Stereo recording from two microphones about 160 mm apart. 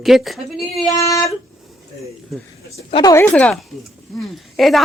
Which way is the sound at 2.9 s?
25° left (ahead or behind).